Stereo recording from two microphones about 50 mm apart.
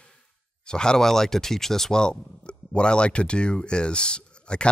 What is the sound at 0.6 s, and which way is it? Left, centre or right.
Speech, centre.